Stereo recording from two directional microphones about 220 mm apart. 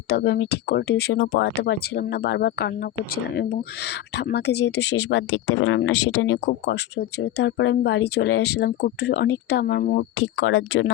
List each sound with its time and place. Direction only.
0.1 s speech: 45° left (ahead or behind)
4.2 s speech: 50° left (ahead or behind)
10.4 s speech: 60° left (ahead or behind)